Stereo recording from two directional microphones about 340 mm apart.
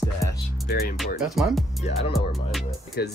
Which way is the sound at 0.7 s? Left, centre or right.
Left.